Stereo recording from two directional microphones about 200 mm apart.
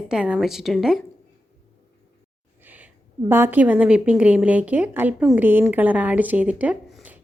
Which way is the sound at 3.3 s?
10° right (ahead or behind).